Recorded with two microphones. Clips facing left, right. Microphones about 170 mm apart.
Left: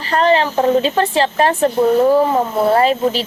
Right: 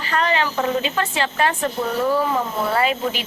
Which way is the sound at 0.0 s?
35° left (ahead or behind).